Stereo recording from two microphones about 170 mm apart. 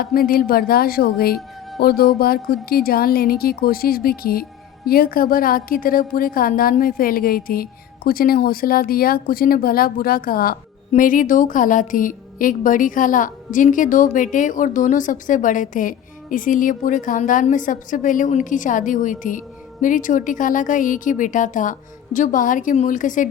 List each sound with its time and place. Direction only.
0.0 s a woman's voice: 60° left (ahead or behind)